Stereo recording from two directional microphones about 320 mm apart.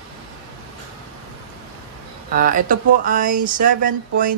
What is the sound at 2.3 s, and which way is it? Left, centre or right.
Speech, right.